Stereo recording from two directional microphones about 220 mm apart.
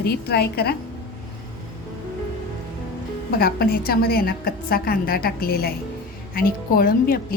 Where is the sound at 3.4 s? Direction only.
45° left (ahead or behind).